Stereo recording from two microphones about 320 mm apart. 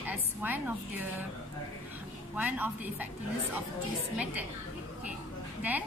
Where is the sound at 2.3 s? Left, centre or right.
Centre.